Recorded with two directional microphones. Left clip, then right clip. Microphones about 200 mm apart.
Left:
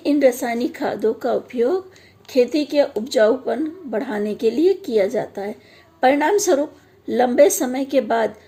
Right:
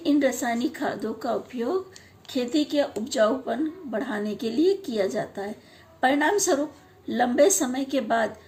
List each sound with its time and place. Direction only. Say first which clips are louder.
0.0 s a woman's voice: left 6 dB; 35° left (ahead or behind)